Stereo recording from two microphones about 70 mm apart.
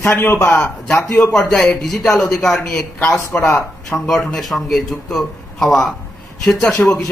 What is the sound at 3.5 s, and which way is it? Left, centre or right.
Speech, left.